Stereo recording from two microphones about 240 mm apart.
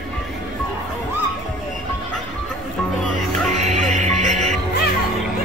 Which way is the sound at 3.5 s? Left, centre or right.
Right.